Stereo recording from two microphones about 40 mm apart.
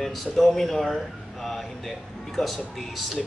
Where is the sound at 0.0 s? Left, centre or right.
Centre.